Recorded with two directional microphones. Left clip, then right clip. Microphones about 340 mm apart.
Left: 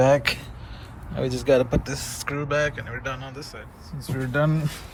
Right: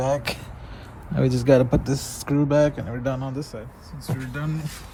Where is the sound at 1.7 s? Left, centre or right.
Centre.